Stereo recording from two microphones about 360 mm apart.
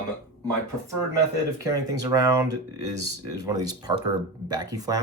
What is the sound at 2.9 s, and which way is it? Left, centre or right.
Speech, right.